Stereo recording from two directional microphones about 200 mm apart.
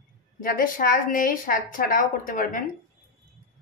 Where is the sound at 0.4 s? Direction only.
45° left (ahead or behind).